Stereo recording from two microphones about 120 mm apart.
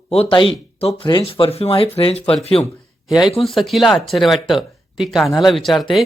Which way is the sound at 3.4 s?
Centre (ahead or behind).